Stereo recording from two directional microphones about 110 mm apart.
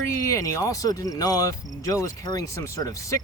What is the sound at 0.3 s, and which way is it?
Speech, 30° left (ahead or behind).